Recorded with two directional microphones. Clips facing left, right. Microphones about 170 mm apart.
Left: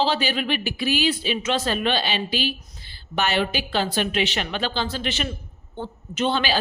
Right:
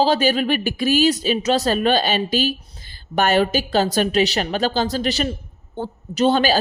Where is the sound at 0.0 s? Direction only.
45° right (ahead or behind).